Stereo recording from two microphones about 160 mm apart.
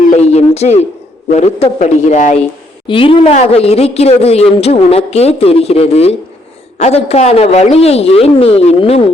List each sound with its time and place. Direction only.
0.1 s speech: 40° left (ahead or behind)
2.8 s a man's voice: 35° left (ahead or behind)